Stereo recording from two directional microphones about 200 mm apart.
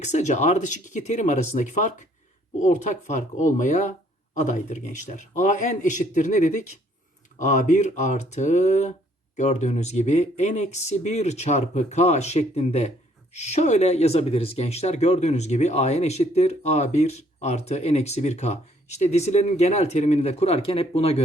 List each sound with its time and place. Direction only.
0.0 s speech: 35° left (ahead or behind)